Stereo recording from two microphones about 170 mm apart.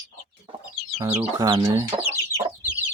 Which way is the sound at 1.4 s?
20° right (ahead or behind).